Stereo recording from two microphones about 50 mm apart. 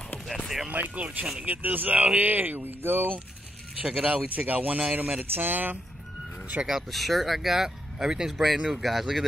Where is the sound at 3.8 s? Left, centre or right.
Right.